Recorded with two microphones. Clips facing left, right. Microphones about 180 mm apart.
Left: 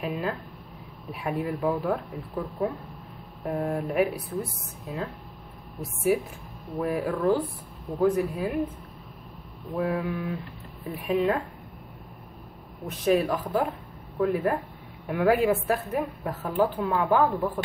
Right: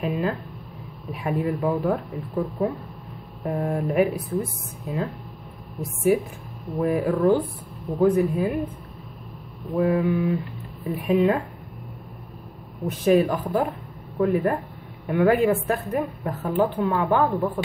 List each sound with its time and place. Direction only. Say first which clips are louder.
0.0 s a sound: right 4 dB; centre (ahead or behind)
1.1 s a woman's voice: right 4 dB; centre (ahead or behind)
6.1 s a woman's voice: right 3 dB; centre (ahead or behind)
9.8 s a woman's voice: right 7 dB; centre (ahead or behind)
12.8 s a woman's voice: right 4 dB; centre (ahead or behind)